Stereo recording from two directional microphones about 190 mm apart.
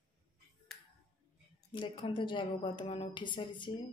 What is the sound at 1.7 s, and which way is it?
A woman's voice, 25° left (ahead or behind).